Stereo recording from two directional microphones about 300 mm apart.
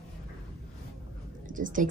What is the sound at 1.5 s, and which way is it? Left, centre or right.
Speech, right.